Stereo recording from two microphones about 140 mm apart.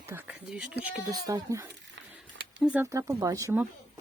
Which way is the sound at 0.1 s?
10° right (ahead or behind).